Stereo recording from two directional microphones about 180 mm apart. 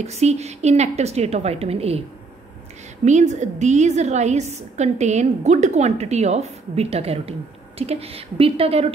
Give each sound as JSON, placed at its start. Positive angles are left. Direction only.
{"t": 0.0, "sound": "a woman's voice", "side_deg": -35}
{"t": 3.1, "sound": "a woman's voice", "side_deg": -40}